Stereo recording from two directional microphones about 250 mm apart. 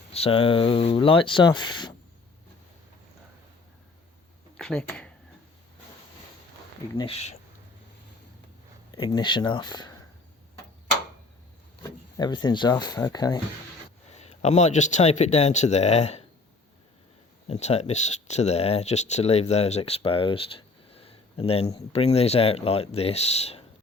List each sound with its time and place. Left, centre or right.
0.1 s speech: left
4.5 s speech: centre
6.9 s speech: left
8.9 s speech: centre
11.8 s speech: centre
14.2 s speech: left
17.5 s speech: left